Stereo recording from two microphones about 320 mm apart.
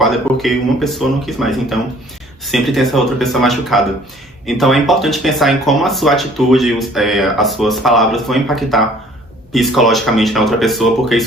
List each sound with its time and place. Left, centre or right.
0.0 s speech: centre